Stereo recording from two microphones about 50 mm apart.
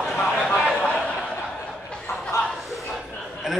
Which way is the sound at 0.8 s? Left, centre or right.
Left.